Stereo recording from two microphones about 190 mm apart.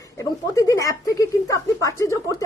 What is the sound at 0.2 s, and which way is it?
Speech, 20° left (ahead or behind).